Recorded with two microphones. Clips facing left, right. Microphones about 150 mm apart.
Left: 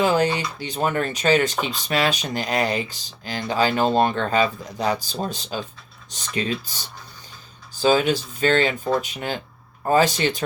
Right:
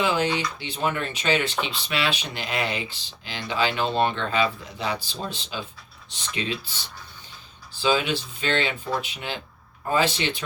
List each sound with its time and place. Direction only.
0.0 s speech: 40° left (ahead or behind)